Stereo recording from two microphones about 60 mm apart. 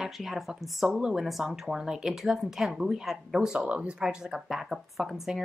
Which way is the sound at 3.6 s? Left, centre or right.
Right.